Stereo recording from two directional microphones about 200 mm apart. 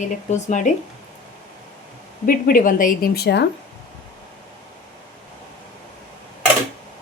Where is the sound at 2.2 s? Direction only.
45° left (ahead or behind).